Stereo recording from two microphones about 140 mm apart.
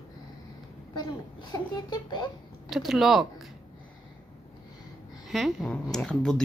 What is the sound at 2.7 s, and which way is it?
Speech, 5° right (ahead or behind).